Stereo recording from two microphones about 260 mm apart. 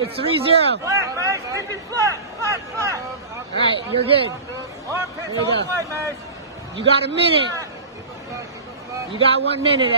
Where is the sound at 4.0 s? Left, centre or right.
Right.